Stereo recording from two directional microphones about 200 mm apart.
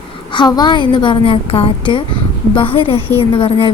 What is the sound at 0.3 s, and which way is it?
A woman's voice, 20° left (ahead or behind).